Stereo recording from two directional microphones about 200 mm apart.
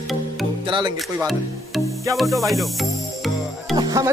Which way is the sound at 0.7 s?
20° right (ahead or behind).